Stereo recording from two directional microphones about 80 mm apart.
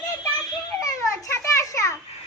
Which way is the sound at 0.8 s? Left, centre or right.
Left.